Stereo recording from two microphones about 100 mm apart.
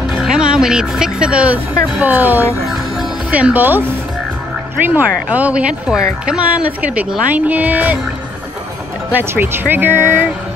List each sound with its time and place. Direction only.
0.2 s a woman's voice: 10° right (ahead or behind)
4.8 s a woman's voice: 15° right (ahead or behind)
9.1 s speech: 25° right (ahead or behind)